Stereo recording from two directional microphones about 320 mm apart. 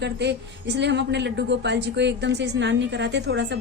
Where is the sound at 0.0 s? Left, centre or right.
Right.